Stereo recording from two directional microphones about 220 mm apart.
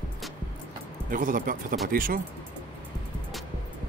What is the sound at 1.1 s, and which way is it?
A man's voice, 40° right (ahead or behind).